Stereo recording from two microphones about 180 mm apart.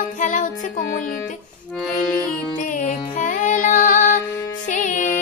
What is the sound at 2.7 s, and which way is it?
Music, 45° left (ahead or behind).